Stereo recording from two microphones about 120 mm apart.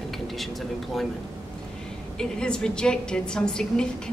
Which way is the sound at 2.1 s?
5° left (ahead or behind).